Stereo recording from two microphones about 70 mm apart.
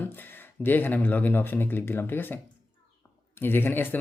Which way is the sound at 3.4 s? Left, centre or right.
Left.